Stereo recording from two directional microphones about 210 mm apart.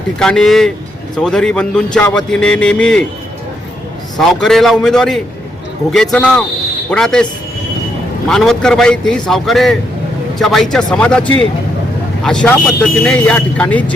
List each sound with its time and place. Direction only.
0.2 s a man's voice: centre (ahead or behind)
4.3 s a man's voice: centre (ahead or behind)
8.3 s a man's voice: centre (ahead or behind)